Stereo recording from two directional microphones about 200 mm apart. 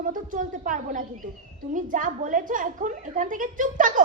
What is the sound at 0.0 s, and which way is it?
A woman's voice, 40° right (ahead or behind).